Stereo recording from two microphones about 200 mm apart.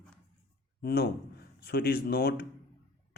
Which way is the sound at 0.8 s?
50° left (ahead or behind).